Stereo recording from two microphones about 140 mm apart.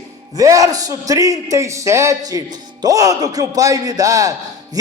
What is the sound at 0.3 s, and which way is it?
A man's voice, 25° right (ahead or behind).